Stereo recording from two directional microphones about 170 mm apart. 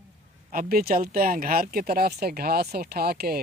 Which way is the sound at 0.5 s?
55° right (ahead or behind).